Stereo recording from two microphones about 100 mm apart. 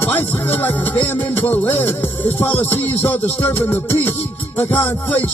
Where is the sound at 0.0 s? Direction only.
20° left (ahead or behind).